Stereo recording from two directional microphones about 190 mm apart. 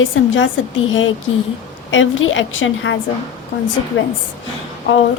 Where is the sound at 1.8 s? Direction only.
90° left.